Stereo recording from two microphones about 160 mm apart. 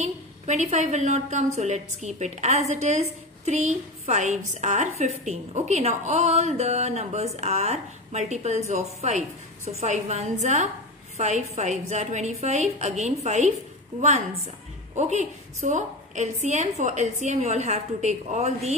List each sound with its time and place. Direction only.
0.0 s a woman's voice: 50° right (ahead or behind)
15.0 s a woman's voice: 45° right (ahead or behind)